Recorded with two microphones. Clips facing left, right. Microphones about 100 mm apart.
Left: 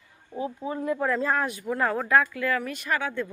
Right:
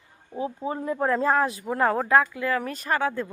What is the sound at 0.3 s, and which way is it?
Speech, 25° right (ahead or behind).